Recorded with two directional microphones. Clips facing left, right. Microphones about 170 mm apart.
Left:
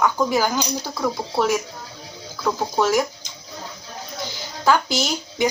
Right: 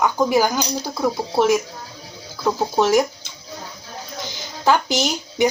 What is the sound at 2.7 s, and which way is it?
Speech, 15° right (ahead or behind).